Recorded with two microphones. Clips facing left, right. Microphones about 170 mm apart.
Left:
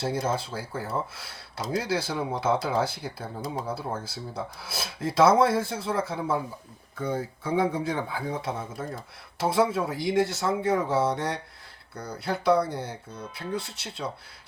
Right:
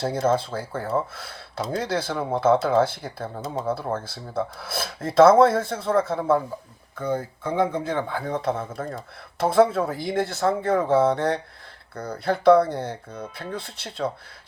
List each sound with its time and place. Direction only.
0.0 s filing: 55° right (ahead or behind)
3.4 s speech: 25° right (ahead or behind)
3.9 s filing: 55° right (ahead or behind)
9.4 s speech: 55° right (ahead or behind)
9.7 s filing: 50° right (ahead or behind)
11.9 s speech: 55° right (ahead or behind)
13.6 s filing: 55° right (ahead or behind)